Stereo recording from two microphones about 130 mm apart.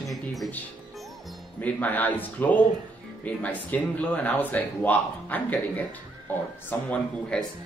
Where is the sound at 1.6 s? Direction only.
15° left (ahead or behind).